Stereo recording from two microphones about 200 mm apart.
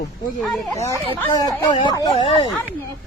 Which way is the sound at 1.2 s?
20° left (ahead or behind).